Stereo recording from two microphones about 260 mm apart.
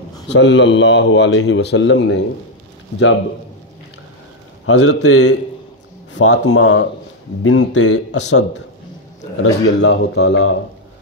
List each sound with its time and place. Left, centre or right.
0.3 s a man's voice: left
4.6 s a man's voice: left
7.4 s a man's voice: left
9.4 s a man's voice: left